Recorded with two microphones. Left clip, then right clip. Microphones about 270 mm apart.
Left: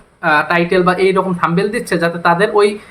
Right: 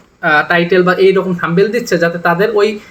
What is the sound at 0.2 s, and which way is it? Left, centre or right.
Speech, left.